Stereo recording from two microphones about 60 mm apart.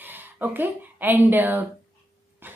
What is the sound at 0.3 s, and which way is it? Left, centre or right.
Speech, right.